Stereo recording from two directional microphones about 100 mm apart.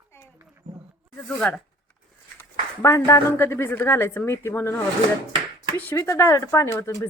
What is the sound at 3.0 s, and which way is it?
A woman's voice, 25° left (ahead or behind).